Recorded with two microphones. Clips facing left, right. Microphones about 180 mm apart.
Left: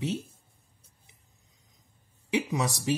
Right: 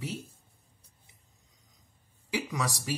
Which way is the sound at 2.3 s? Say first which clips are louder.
Left 4 dB; 20° left (ahead or behind).